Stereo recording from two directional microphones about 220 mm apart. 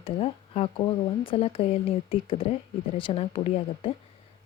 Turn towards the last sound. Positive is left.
turn(degrees=25)  # may be behind; listen again after turning